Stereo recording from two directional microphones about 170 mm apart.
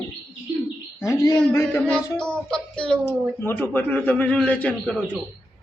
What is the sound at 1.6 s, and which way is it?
A man's voice, 5° left (ahead or behind).